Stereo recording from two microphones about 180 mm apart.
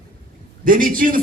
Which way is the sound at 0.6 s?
50° right (ahead or behind).